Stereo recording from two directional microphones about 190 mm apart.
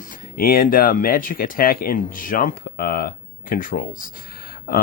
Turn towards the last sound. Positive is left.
turn(degrees=50)  # may be behind; listen again after turning